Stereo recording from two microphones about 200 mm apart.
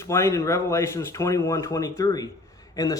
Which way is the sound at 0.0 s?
15° left (ahead or behind).